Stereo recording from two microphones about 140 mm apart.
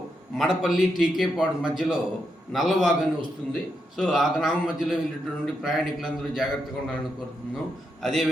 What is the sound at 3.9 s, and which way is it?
A man's voice, centre (ahead or behind).